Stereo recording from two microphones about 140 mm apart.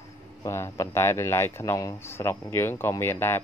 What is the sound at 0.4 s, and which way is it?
Speech, 20° left (ahead or behind).